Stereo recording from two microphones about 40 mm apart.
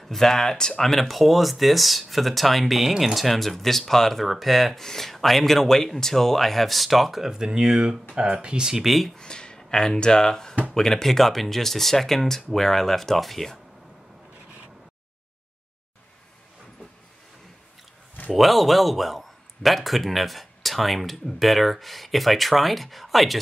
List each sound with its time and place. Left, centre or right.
0.0 s speech: centre
0.8 s speech: centre
7.2 s speech: centre
8.8 s speech: centre
9.1 s speech: centre
18.3 s speech: centre